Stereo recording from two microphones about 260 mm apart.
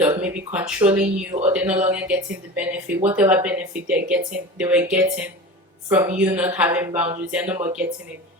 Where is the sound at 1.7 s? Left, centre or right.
Right.